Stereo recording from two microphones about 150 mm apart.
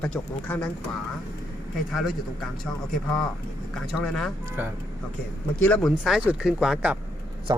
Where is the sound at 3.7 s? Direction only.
Centre (ahead or behind).